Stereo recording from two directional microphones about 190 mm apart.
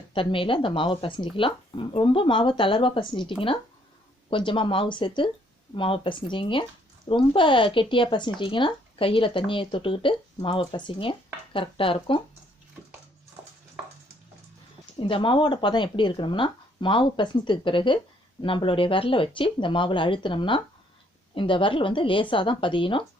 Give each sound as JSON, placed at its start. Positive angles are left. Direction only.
{"t": 0.1, "sound": "speech", "side_deg": 25}
{"t": 15.0, "sound": "speech", "side_deg": 25}